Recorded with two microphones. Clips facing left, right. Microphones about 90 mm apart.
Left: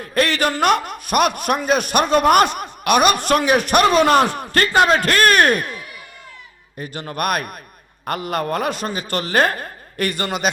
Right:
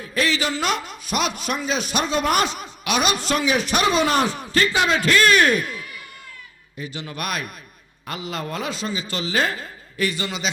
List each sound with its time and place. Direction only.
0.0 s a man's voice: 55° left (ahead or behind)